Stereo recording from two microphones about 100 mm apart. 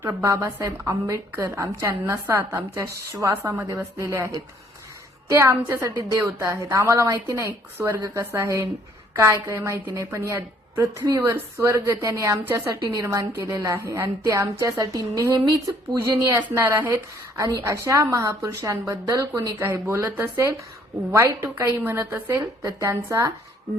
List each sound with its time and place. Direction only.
0.0 s a woman's voice: 30° right (ahead or behind)
5.3 s a woman's voice: 25° right (ahead or behind)
12.4 s a woman's voice: 20° right (ahead or behind)
12.7 s a woman's voice: 30° right (ahead or behind)
16.3 s a woman's voice: 25° right (ahead or behind)
20.1 s a woman's voice: 20° right (ahead or behind)